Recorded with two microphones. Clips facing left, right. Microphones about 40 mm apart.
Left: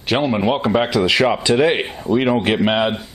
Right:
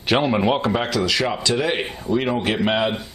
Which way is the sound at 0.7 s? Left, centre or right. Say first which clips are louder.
Left 5 dB; centre.